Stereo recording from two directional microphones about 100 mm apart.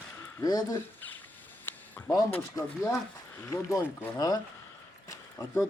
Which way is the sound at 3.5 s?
35° left (ahead or behind).